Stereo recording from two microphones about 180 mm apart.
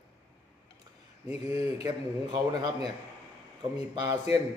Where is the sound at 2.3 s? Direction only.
20° right (ahead or behind).